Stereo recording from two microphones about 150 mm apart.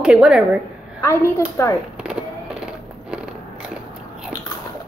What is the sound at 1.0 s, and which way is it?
Speech, 20° left (ahead or behind).